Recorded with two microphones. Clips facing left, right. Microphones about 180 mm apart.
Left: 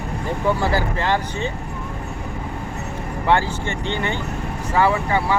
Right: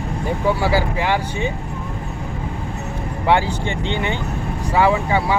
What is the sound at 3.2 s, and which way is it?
Speech, 15° right (ahead or behind).